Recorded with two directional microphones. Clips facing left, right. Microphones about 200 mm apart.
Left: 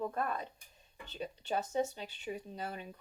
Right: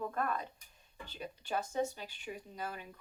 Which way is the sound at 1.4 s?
25° left (ahead or behind).